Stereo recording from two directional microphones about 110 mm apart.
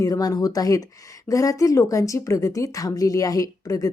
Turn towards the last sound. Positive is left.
turn(degrees=30)  # may be behind; listen again after turning